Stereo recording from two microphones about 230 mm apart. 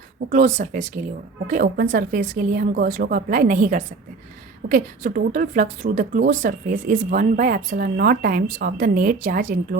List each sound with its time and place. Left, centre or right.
0.3 s a woman's voice: right